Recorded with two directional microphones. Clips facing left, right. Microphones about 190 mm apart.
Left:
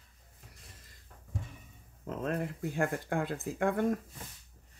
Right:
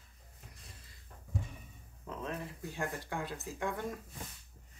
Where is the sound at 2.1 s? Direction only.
50° left (ahead or behind).